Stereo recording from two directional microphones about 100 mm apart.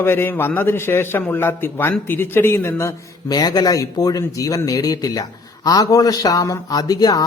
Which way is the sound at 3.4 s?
40° left (ahead or behind).